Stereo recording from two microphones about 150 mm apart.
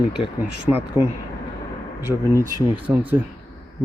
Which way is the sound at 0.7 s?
15° right (ahead or behind).